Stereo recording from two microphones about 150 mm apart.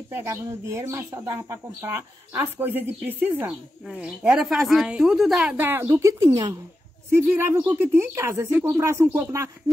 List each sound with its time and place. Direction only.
0.1 s speech: 15° right (ahead or behind)